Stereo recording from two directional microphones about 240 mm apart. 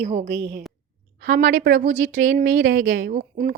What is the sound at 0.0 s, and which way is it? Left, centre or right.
A woman's voice, right.